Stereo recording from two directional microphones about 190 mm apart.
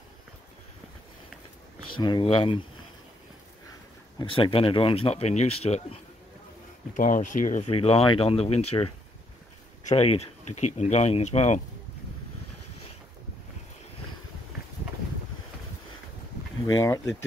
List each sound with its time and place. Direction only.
2.0 s speech: 25° left (ahead or behind)
4.2 s speech: 30° left (ahead or behind)
16.6 s speech: 20° left (ahead or behind)